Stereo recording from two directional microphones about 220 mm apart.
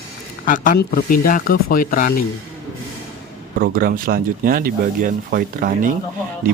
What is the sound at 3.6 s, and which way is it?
A man's voice, 40° right (ahead or behind).